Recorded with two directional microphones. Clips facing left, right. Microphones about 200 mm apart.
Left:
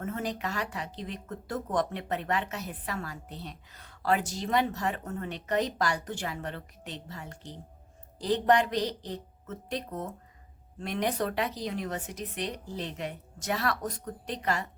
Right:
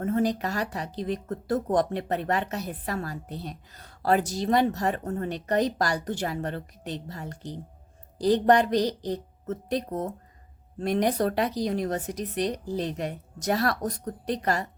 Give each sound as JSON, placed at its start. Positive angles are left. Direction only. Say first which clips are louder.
{"t": 0.0, "sound": "speech", "louder": "right 8 dB", "side_deg": -35}